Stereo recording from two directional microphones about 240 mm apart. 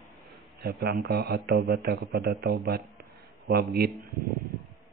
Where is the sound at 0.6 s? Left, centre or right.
Right.